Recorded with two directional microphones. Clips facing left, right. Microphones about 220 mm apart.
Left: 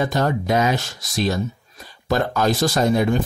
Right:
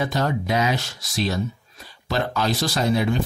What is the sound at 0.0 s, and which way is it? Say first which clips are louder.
Speech: left 3 dB; 50° left (ahead or behind).